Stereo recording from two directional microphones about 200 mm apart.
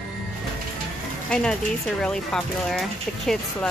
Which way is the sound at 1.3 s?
5° left (ahead or behind).